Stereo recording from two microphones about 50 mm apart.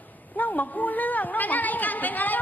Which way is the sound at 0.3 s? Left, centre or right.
Left.